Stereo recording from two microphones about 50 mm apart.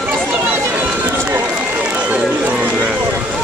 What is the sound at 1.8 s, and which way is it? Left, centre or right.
Run, right.